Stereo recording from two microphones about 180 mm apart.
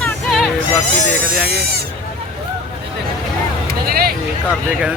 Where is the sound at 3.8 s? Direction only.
55° right (ahead or behind).